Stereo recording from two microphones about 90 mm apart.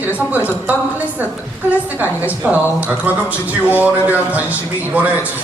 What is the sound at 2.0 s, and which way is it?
Speech, 15° right (ahead or behind).